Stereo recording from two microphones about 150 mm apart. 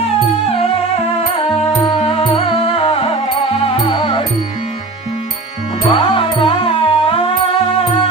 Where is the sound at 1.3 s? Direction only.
40° left (ahead or behind).